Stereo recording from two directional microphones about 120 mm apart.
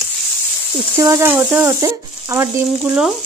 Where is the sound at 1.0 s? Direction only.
25° right (ahead or behind).